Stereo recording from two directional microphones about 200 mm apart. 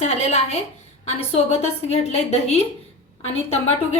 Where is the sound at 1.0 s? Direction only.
30° left (ahead or behind).